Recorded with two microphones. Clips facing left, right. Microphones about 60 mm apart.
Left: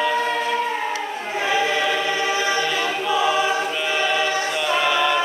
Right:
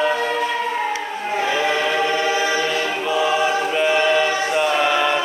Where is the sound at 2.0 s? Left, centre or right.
Right.